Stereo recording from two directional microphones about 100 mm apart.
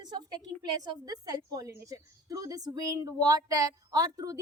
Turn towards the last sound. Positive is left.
turn(degrees=-40)  # may be behind; listen again after turning